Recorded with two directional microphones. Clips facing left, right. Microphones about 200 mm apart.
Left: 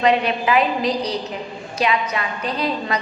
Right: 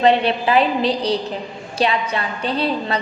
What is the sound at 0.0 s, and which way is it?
A woman's voice, 30° right (ahead or behind).